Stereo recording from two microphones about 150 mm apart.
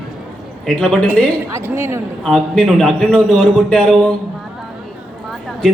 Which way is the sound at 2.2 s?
5° left (ahead or behind).